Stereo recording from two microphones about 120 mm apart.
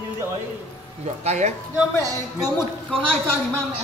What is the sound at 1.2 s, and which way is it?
Speech, 75° right (ahead or behind).